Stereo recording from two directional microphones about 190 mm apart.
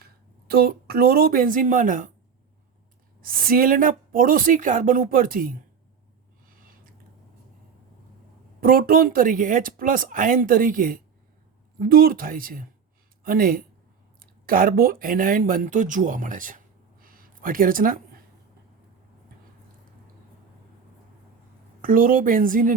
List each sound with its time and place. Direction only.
0.0 s speech: 50° right (ahead or behind)
3.2 s speech: 50° right (ahead or behind)
8.6 s speech: 50° right (ahead or behind)
21.8 s speech: 45° right (ahead or behind)